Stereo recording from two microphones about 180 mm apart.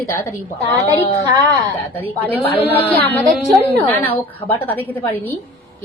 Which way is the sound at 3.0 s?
10° left (ahead or behind).